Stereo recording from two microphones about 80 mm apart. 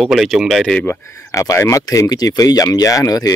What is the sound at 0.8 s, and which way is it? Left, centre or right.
Speech, left.